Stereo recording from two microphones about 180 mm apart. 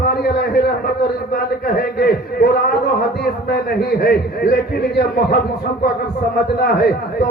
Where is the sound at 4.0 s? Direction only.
60° left (ahead or behind).